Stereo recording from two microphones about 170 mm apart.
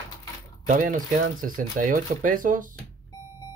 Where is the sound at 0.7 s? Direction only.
50° right (ahead or behind).